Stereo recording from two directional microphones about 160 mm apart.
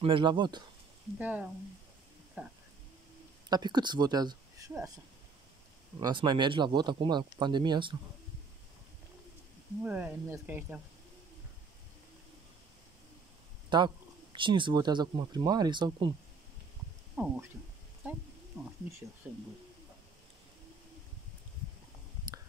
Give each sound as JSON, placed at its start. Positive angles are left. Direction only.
{"t": 0.0, "sound": "speech", "side_deg": -30}
{"t": 1.1, "sound": "speech", "side_deg": -10}
{"t": 3.4, "sound": "speech", "side_deg": -25}
{"t": 5.9, "sound": "speech", "side_deg": -30}
{"t": 9.8, "sound": "speech", "side_deg": -10}
{"t": 13.7, "sound": "speech", "side_deg": -30}
{"t": 17.2, "sound": "speech", "side_deg": -10}